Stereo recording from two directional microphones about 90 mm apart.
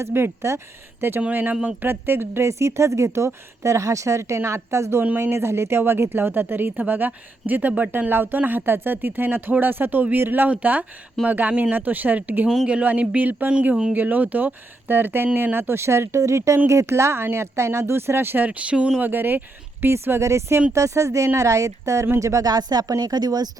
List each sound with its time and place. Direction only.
0.0 s speech: 30° right (ahead or behind)
1.2 s speech: 20° right (ahead or behind)
12.5 s speech: 10° right (ahead or behind); by 23.5 s 45° right (ahead or behind)